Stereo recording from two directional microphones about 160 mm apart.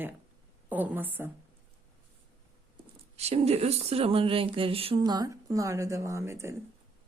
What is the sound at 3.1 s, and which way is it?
Speech, 40° right (ahead or behind).